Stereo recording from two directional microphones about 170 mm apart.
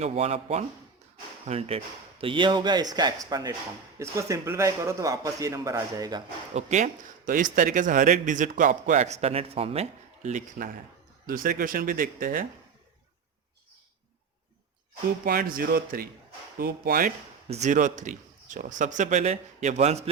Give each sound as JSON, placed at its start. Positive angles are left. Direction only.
{"t": 0.0, "sound": "a man's voice", "side_deg": -40}
{"t": 6.5, "sound": "speech", "side_deg": -40}
{"t": 15.2, "sound": "speech", "side_deg": -60}
{"t": 17.5, "sound": "speech", "side_deg": -45}